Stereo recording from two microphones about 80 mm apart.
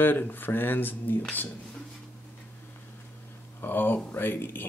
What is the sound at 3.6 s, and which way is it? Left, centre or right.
Speech, left.